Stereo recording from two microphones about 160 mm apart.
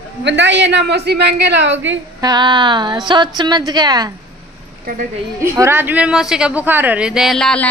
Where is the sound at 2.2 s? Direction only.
25° right (ahead or behind).